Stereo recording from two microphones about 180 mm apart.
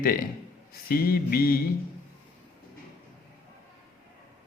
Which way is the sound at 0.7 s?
55° left (ahead or behind).